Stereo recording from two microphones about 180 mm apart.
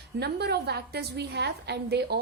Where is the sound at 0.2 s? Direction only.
65° right (ahead or behind).